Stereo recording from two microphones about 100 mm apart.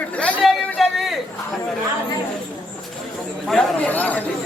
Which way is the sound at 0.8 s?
Centre (ahead or behind).